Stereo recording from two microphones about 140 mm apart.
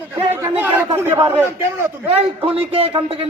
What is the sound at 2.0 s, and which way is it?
Speech, 45° right (ahead or behind).